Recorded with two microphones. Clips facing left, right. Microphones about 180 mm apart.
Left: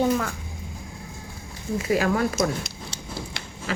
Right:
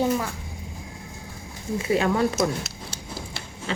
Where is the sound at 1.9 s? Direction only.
25° right (ahead or behind).